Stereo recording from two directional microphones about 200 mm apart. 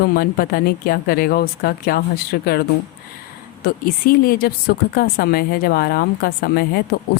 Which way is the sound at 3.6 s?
45° left (ahead or behind).